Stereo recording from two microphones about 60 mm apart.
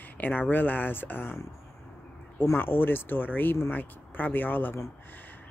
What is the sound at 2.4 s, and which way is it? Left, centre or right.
Speech, left.